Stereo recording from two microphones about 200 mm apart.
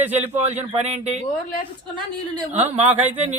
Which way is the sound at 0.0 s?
10° right (ahead or behind).